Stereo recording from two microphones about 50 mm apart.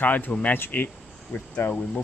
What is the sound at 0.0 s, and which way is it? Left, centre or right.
Speech, left.